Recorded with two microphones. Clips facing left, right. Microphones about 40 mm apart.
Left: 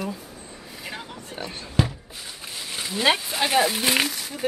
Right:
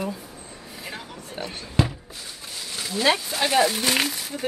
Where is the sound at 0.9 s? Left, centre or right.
Centre.